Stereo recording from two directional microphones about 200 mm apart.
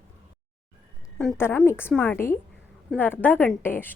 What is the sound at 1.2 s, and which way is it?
A woman's voice, 5° left (ahead or behind).